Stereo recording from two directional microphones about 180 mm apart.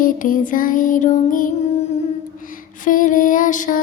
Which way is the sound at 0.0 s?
50° left (ahead or behind).